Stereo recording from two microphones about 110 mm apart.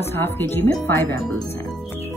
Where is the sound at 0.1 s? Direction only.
20° left (ahead or behind).